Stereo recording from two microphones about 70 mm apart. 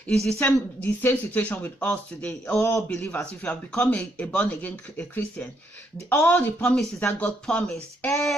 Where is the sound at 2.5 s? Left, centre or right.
Left.